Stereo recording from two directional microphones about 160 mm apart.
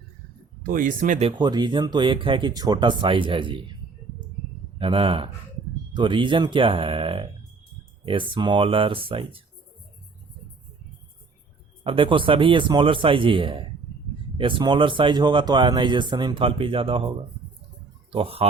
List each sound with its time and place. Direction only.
0.6 s speech: 60° right (ahead or behind)
1.4 s speech: 25° right (ahead or behind)
4.8 s speech: 35° right (ahead or behind)
11.8 s speech: 35° right (ahead or behind)
18.1 s speech: 35° right (ahead or behind)